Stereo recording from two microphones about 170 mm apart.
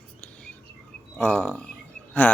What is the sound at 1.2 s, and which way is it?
Speech, 5° left (ahead or behind).